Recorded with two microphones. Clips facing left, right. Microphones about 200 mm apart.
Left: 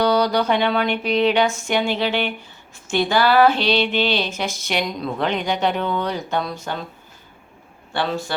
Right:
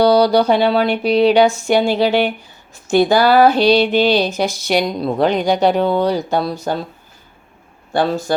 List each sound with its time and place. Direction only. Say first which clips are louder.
0.0 s speech: right 6 dB; 35° right (ahead or behind)
7.9 s speech: right 7 dB; 45° right (ahead or behind)